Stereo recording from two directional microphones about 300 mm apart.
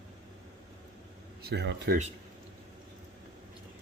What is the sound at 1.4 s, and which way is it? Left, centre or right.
Speech, right.